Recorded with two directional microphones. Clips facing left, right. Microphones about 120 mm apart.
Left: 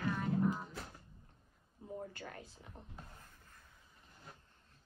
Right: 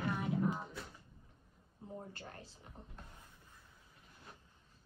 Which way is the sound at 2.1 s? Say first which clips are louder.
Left 2 dB; 30° right (ahead or behind).